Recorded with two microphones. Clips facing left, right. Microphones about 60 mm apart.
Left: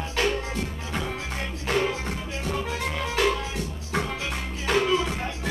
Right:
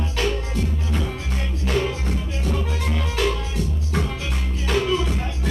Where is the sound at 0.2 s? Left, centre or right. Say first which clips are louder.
Right 1 dB; left.